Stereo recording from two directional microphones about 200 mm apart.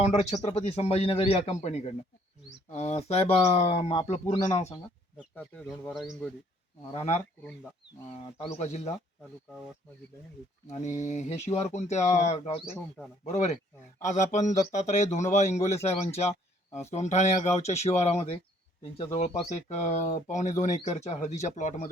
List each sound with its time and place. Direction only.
0.0 s speech: 35° left (ahead or behind)
5.5 s speech: 5° left (ahead or behind)
8.5 s speech: 35° left (ahead or behind)
10.7 s speech: 35° left (ahead or behind)